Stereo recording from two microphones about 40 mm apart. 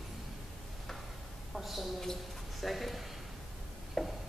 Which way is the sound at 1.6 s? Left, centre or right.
Centre.